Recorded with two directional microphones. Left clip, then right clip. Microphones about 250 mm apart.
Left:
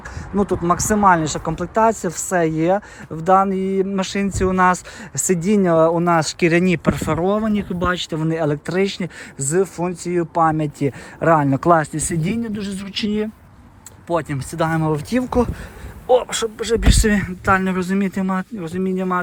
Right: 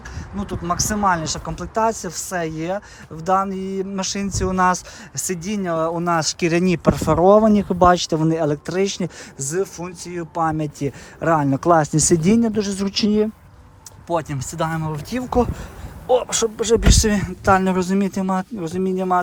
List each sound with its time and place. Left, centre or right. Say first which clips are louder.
0.3 s speech: left 6 dB; centre
12.5 s a man's voice: right 5 dB; right